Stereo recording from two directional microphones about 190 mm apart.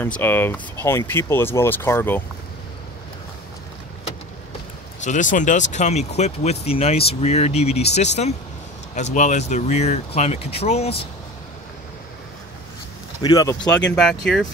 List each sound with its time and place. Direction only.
0.0 s speech: 10° left (ahead or behind)
5.0 s speech: 40° left (ahead or behind)
9.1 s speech: 40° left (ahead or behind)
13.2 s speech: 20° left (ahead or behind)
13.9 s speech: 5° left (ahead or behind)